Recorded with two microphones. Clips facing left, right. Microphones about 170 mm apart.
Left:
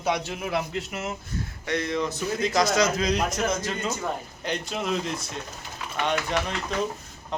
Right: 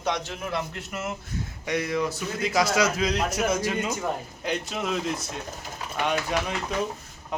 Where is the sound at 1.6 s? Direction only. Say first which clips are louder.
Right 1 dB; 10° right (ahead or behind).